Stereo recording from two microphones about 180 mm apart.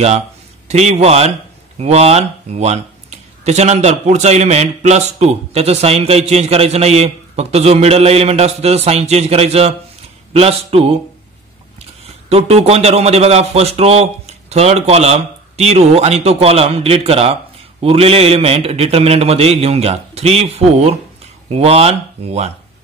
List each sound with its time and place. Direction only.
0.7 s a man's voice: 40° right (ahead or behind)
12.3 s a man's voice: 35° right (ahead or behind)